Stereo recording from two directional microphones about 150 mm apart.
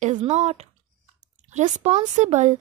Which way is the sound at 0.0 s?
50° right (ahead or behind).